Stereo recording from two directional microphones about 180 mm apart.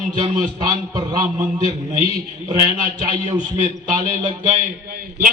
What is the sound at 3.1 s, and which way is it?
A man's voice, 25° right (ahead or behind).